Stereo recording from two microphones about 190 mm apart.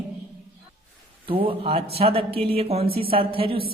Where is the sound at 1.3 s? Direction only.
30° right (ahead or behind).